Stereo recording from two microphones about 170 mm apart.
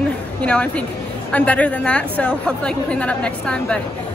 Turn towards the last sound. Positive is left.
turn(degrees=5)  # may be behind; listen again after turning